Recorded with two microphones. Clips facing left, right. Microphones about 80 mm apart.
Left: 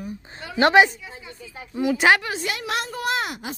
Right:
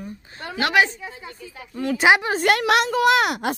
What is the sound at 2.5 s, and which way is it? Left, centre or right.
A woman's voice, right.